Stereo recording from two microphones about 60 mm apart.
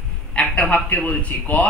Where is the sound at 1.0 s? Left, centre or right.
Centre.